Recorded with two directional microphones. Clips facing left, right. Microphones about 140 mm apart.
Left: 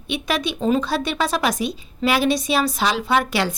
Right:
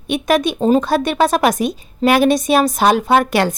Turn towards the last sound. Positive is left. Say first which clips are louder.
# right 6 dB
turn(degrees=-50)  # may be behind; listen again after turning